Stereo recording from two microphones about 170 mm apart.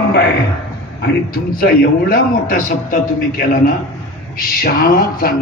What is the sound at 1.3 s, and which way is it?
A man's voice, 60° left (ahead or behind).